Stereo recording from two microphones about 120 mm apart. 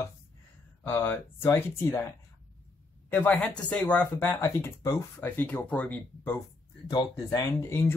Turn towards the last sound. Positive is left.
turn(degrees=20)  # may be behind; listen again after turning